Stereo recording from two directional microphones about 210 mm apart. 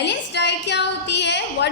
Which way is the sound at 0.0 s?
55° left (ahead or behind).